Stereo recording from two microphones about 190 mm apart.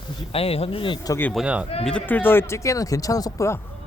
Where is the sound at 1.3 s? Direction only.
5° right (ahead or behind).